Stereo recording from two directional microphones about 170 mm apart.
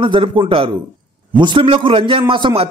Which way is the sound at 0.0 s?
30° right (ahead or behind).